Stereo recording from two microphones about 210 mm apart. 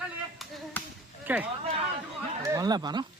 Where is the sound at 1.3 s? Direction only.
10° right (ahead or behind).